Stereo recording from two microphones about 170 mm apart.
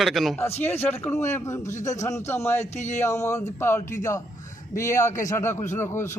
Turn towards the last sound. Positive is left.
turn(degrees=15)  # may be behind; listen again after turning